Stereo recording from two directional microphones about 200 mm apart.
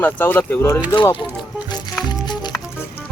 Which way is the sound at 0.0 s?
10° left (ahead or behind).